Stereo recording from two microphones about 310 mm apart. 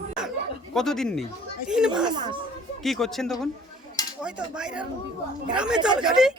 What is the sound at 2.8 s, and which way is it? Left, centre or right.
Speech, centre.